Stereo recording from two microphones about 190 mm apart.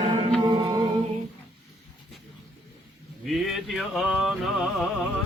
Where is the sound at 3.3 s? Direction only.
Centre (ahead or behind).